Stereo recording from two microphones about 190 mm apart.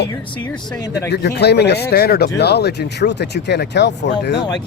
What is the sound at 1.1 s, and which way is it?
Speech, 60° left (ahead or behind).